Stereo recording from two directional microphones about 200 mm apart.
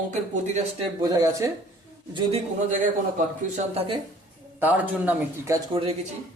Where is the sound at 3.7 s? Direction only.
30° right (ahead or behind).